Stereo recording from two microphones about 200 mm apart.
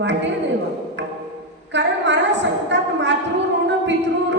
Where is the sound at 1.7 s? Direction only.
60° right (ahead or behind).